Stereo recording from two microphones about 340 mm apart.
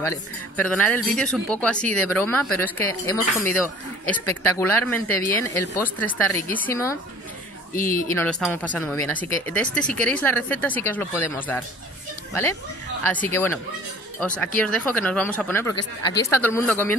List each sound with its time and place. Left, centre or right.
0.0 s a woman's voice: centre
7.7 s speech: left
8.1 s speech: centre
13.0 s speech: centre